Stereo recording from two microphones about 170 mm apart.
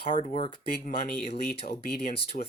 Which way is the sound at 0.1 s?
40° left (ahead or behind).